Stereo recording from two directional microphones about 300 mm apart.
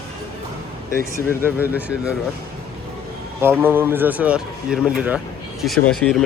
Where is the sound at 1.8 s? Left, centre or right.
Centre.